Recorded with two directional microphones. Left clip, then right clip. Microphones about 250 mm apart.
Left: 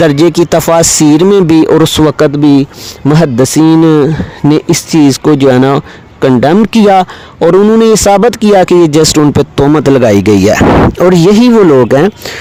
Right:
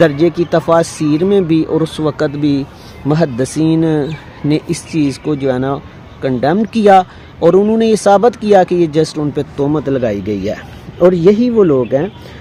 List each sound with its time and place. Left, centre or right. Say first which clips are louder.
0.0 s speech: left 5 dB; left